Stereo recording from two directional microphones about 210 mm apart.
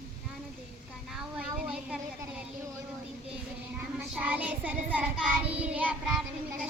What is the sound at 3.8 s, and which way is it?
Child singing, 5° right (ahead or behind).